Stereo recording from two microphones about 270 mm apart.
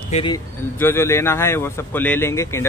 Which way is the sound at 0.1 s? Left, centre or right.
Centre.